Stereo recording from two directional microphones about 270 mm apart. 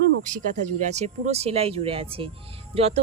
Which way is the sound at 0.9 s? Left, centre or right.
Right.